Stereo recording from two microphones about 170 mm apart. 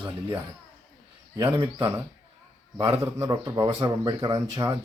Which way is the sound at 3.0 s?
20° right (ahead or behind).